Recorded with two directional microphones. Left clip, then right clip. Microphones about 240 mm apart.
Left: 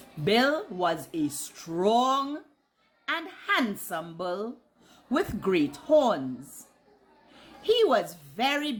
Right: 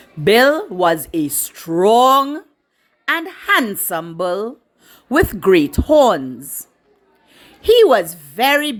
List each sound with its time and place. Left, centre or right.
0.3 s speech: right
7.3 s a woman's voice: right